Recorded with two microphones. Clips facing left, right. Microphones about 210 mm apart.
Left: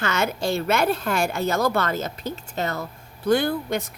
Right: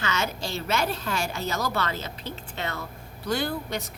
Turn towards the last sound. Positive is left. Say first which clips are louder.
# left 5 dB
turn(degrees=55)  # may be behind; listen again after turning